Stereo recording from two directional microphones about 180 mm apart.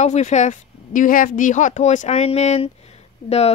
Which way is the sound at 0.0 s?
40° left (ahead or behind).